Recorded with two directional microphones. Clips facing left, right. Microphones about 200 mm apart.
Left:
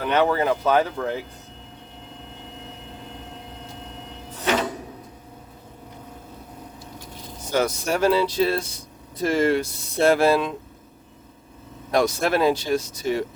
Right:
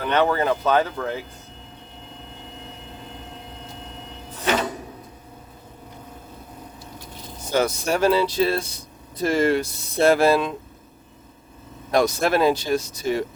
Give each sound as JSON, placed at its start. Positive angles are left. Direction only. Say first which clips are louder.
{"t": 0.0, "sound": "speech", "louder": "even", "side_deg": 5}
{"t": 7.5, "sound": "speech", "louder": "right 1 dB", "side_deg": -30}
{"t": 11.9, "sound": "speech", "louder": "right 1 dB", "side_deg": -40}